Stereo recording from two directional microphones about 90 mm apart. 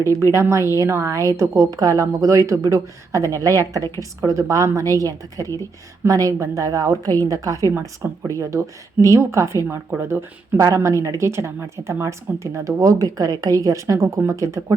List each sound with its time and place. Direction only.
0.3 s a woman's voice: 30° right (ahead or behind)